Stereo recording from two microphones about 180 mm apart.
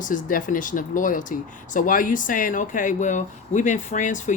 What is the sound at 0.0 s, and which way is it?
Speech, 45° left (ahead or behind).